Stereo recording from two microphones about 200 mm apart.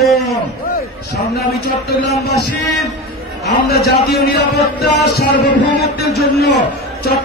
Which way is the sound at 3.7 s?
50° left (ahead or behind).